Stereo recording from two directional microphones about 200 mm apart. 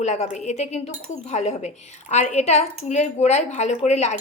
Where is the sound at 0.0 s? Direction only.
35° left (ahead or behind).